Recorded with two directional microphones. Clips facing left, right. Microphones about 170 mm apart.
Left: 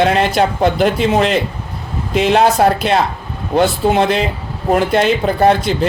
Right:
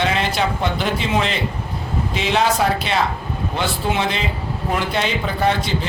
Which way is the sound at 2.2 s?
55° left (ahead or behind).